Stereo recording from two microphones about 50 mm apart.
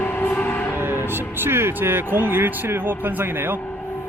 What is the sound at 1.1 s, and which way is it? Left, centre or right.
A man's voice, right.